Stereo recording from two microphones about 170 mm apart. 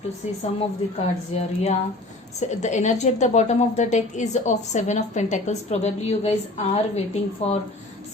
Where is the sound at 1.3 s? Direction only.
40° left (ahead or behind).